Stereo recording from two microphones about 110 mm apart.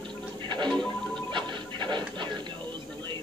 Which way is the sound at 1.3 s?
45° right (ahead or behind).